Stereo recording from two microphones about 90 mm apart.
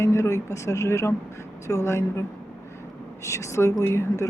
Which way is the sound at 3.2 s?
35° left (ahead or behind).